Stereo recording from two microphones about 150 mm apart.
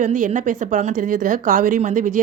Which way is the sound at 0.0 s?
55° right (ahead or behind).